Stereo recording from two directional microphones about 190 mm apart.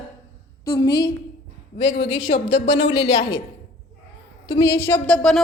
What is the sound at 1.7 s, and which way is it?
A woman's voice, 65° left (ahead or behind).